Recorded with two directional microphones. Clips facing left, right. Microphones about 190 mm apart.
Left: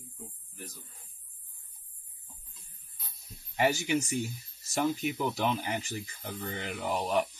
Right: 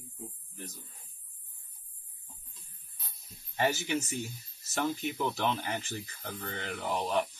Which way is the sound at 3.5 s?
15° left (ahead or behind).